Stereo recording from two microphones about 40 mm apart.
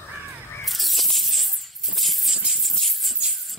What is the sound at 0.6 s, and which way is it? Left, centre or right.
Snake, centre.